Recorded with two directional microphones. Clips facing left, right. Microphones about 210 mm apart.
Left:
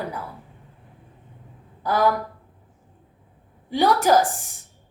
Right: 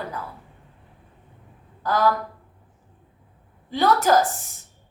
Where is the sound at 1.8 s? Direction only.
15° left (ahead or behind).